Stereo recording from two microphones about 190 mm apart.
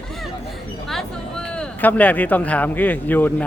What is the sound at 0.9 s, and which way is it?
Speech, 5° left (ahead or behind).